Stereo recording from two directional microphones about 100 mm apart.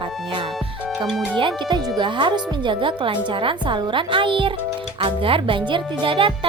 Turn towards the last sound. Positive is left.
turn(degrees=-60)  # may be behind; listen again after turning